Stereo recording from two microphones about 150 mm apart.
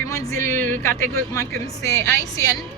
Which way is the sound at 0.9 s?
70° right (ahead or behind).